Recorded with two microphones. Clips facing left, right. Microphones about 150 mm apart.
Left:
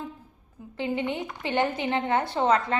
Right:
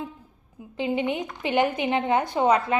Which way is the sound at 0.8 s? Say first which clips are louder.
Right 3 dB; 15° right (ahead or behind).